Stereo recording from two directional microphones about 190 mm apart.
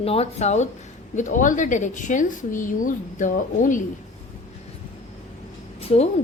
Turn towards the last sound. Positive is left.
turn(degrees=35)  # may be behind; listen again after turning